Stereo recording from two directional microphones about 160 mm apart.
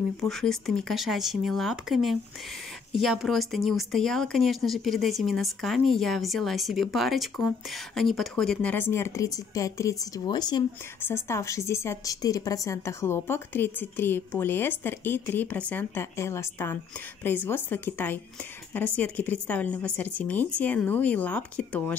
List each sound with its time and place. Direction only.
0.2 s speech: centre (ahead or behind); by 10.6 s 25° left (ahead or behind)
11.0 s a woman's voice: 15° left (ahead or behind)